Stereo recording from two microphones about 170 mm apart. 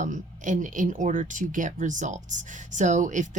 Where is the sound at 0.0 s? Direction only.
50° right (ahead or behind).